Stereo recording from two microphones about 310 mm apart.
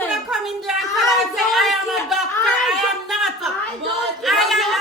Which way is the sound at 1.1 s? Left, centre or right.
Centre.